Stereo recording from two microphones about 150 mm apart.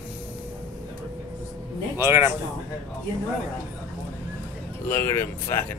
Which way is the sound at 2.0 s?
15° right (ahead or behind).